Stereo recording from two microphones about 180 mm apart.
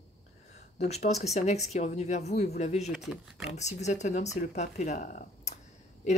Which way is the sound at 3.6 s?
40° left (ahead or behind).